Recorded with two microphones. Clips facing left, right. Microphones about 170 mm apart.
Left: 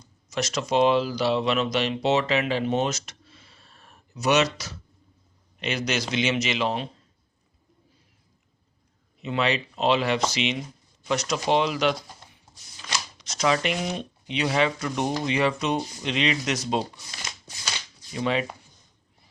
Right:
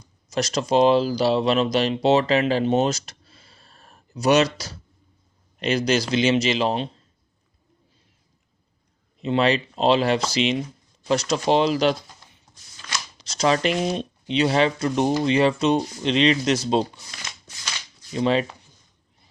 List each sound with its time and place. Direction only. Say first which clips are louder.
0.3 s speech: right 4 dB; 35° right (ahead or behind)
9.2 s speech: right 5 dB; 35° right (ahead or behind)
12.8 s a sound: left 1 dB; 10° left (ahead or behind)
13.1 s speech: right 3 dB; 30° right (ahead or behind)
18.2 s speech: right 5 dB; 30° right (ahead or behind)